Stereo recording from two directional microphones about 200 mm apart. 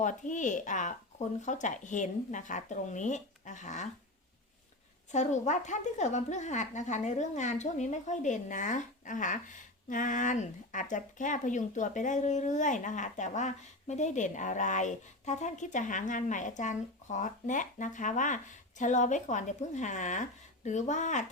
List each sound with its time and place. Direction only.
0.0 s a woman's voice: 40° left (ahead or behind)
5.1 s a woman's voice: 35° left (ahead or behind)